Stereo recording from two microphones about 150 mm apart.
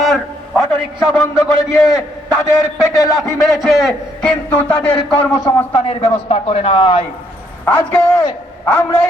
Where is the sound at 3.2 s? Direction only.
Centre (ahead or behind).